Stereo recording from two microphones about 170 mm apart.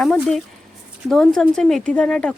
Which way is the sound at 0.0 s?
5° left (ahead or behind).